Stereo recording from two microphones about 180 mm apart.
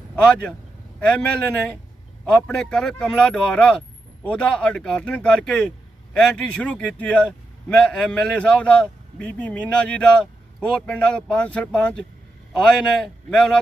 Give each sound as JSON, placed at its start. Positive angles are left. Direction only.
{"t": 0.1, "sound": "vehicle", "side_deg": 5}
{"t": 2.4, "sound": "a man's voice", "side_deg": 5}